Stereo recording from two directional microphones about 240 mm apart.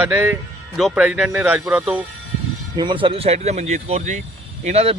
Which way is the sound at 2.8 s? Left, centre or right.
Centre.